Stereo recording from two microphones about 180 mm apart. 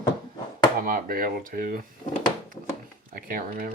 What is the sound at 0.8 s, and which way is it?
Speech, 50° right (ahead or behind).